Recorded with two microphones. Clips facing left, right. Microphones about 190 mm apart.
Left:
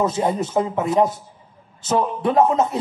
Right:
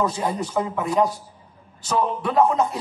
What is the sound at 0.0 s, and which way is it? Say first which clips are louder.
Speech: left 4 dB; 25° left (ahead or behind).